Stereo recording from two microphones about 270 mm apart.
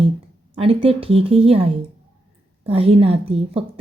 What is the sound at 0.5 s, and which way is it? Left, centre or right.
A woman's voice, right.